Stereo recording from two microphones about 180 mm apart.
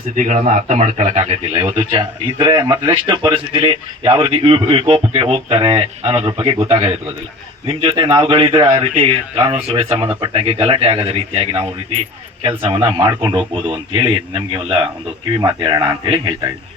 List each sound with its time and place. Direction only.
0.2 s a man's voice: 40° right (ahead or behind); by 16.2 s 25° right (ahead or behind)